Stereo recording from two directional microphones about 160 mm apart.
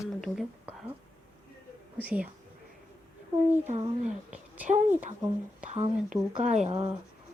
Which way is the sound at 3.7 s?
45° right (ahead or behind).